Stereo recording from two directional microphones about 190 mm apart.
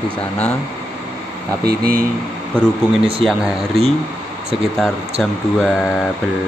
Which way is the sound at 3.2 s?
5° left (ahead or behind).